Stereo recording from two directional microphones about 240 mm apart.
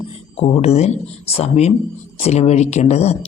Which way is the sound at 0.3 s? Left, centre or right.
Left.